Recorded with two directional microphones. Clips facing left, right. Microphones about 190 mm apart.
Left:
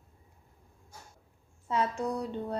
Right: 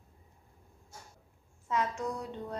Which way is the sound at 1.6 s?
35° left (ahead or behind).